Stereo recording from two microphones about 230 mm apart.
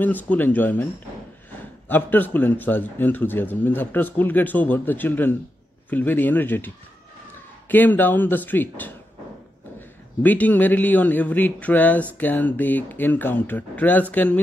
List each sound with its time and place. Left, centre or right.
0.0 s a man's voice: centre
1.9 s a man's voice: centre